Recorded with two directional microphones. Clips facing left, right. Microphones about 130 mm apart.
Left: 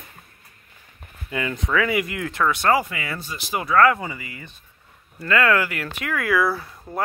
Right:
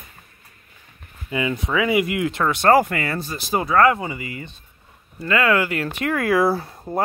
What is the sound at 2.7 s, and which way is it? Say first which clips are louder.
Speech: right 5 dB; 50° right (ahead or behind).